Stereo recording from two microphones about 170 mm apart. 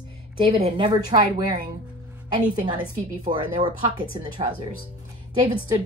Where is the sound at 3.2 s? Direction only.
30° right (ahead or behind).